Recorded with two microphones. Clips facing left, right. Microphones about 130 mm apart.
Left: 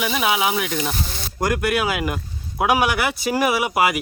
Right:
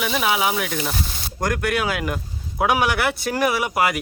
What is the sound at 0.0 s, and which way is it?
Speech, 5° left (ahead or behind).